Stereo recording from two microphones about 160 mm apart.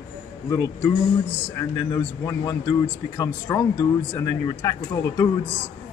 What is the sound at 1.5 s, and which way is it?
Speech, 20° left (ahead or behind).